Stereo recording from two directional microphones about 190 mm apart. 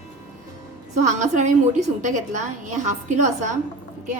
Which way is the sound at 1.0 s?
40° right (ahead or behind).